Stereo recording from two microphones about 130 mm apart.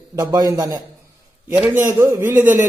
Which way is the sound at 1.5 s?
15° right (ahead or behind).